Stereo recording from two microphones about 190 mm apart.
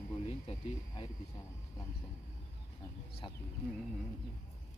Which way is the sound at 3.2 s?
25° left (ahead or behind).